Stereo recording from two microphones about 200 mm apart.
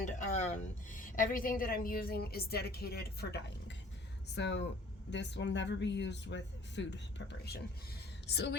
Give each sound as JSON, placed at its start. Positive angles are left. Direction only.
{"t": 0.0, "sound": "a woman's voice", "side_deg": 35}
{"t": 8.3, "sound": "speech", "side_deg": 55}